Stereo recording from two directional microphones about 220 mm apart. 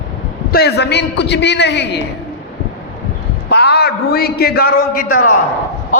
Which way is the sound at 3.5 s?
50° left (ahead or behind).